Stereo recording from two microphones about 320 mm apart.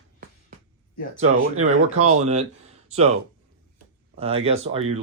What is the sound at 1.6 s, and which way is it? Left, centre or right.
Speech, right.